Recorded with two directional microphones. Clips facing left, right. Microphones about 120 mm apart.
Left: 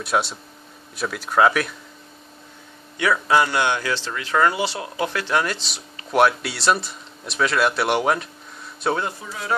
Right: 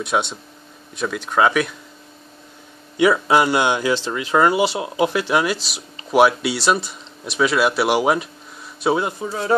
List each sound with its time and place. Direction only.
0.0 s speech: 5° left (ahead or behind)
3.0 s speech: 15° right (ahead or behind)
9.2 s a man's voice: 30° right (ahead or behind)